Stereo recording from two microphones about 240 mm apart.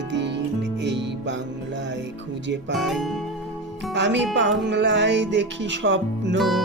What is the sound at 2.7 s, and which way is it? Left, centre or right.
Music, centre.